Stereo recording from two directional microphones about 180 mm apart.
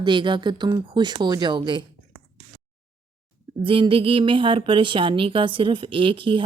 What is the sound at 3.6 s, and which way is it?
Speech, 30° right (ahead or behind).